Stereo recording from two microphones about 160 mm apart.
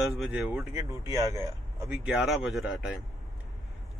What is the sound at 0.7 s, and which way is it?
Speech, 20° right (ahead or behind).